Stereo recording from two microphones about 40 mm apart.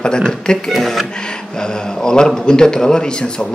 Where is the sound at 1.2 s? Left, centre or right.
Centre.